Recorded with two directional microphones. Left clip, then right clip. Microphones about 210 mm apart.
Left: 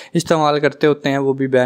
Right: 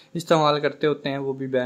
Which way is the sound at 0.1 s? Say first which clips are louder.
Left 4 dB; 45° left (ahead or behind).